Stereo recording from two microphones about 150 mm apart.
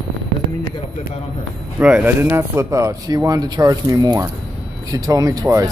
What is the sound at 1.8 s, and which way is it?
Speech, 10° right (ahead or behind).